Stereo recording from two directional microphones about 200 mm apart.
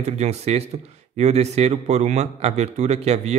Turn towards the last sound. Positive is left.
turn(degrees=-35)  # may be behind; listen again after turning